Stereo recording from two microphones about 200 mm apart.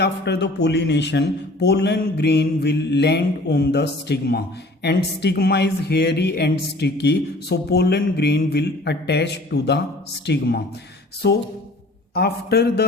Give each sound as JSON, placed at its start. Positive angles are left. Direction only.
{"t": 0.0, "sound": "a man's voice", "side_deg": 55}